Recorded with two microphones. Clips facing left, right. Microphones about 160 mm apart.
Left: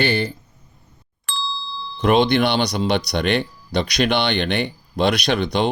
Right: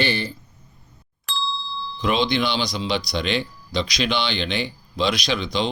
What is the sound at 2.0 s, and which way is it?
Speech, 60° left (ahead or behind).